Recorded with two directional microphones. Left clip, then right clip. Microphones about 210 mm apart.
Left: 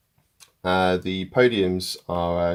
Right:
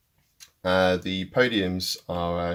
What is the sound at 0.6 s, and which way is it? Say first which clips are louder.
Speech: left 1 dB; 30° left (ahead or behind).